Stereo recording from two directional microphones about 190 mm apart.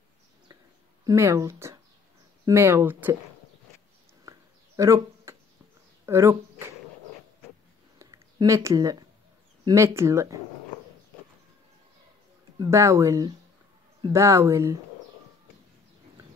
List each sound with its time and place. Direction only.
1.0 s speech: 15° right (ahead or behind)
4.3 s a sound: 15° right (ahead or behind)
6.0 s speech: 15° right (ahead or behind)
8.0 s a sound: 20° right (ahead or behind)
9.7 s speech: 15° right (ahead or behind)
12.5 s speech: 15° right (ahead or behind)